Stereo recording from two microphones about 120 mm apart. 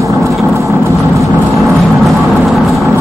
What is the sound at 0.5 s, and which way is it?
Vehicle, 25° right (ahead or behind).